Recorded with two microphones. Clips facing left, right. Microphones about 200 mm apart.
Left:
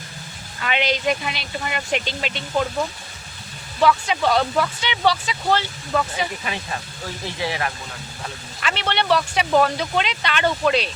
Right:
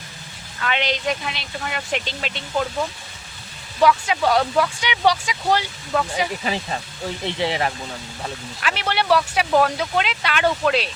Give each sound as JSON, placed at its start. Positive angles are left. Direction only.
{"t": 0.6, "sound": "speech", "side_deg": 5}
{"t": 3.8, "sound": "speech", "side_deg": -10}
{"t": 6.4, "sound": "speech", "side_deg": -30}
{"t": 8.6, "sound": "speech", "side_deg": -5}